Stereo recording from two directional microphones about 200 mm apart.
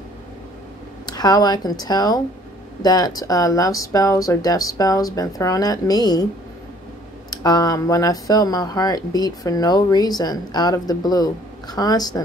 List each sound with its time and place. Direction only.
1.0 s speech: 20° left (ahead or behind)
7.2 s speech: 20° left (ahead or behind)